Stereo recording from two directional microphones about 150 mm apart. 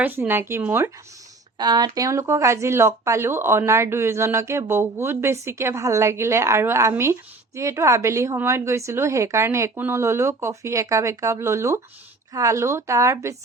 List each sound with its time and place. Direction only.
0.0 s speech: 15° right (ahead or behind)
1.5 s a woman's voice: 30° right (ahead or behind)